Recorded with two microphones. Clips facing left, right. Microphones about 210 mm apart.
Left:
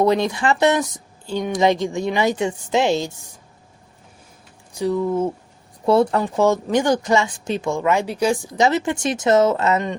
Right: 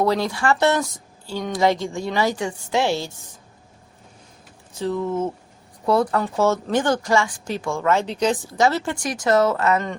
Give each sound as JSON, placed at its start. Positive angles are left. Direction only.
{"t": 0.0, "sound": "a woman's voice", "side_deg": 20}
{"t": 4.7, "sound": "speech", "side_deg": 15}
{"t": 5.8, "sound": "a woman's voice", "side_deg": 25}